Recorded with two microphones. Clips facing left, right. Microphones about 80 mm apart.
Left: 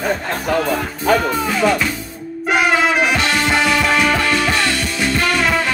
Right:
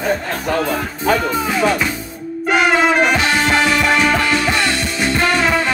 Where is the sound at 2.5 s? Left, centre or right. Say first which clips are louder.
Right 1 dB; centre.